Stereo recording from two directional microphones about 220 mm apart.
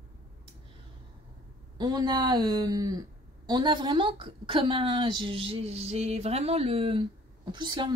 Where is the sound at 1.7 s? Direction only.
20° right (ahead or behind).